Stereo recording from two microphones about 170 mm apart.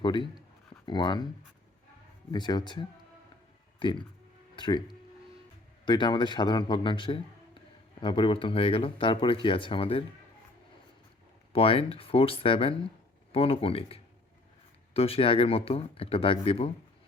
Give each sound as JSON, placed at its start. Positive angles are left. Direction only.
{"t": 0.0, "sound": "speech", "side_deg": 30}
{"t": 2.3, "sound": "speech", "side_deg": 25}
{"t": 5.8, "sound": "speech", "side_deg": 25}
{"t": 11.5, "sound": "speech", "side_deg": 35}